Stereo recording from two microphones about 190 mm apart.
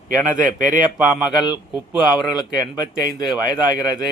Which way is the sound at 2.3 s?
20° left (ahead or behind).